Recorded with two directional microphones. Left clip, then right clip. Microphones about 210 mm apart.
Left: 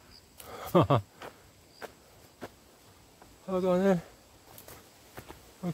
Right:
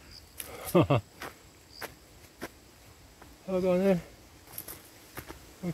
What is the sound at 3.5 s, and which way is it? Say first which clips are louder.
Speech: even; 15° left (ahead or behind).